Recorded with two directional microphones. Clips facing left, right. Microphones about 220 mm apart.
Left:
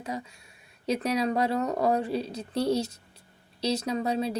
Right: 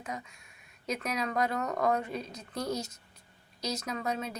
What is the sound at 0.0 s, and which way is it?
Speech, 30° left (ahead or behind).